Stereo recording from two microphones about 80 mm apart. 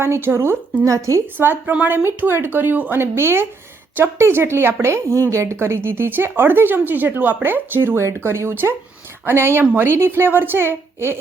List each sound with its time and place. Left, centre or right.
0.0 s a woman's voice: right
1.4 s a woman's voice: right